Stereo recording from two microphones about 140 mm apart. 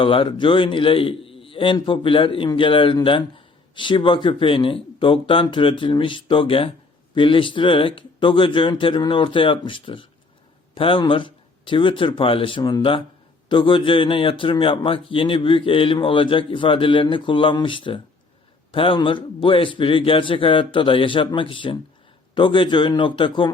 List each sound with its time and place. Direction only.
0.0 s a man's voice: 40° left (ahead or behind)